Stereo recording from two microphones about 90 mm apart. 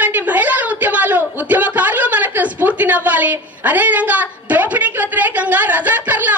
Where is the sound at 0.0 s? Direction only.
15° right (ahead or behind).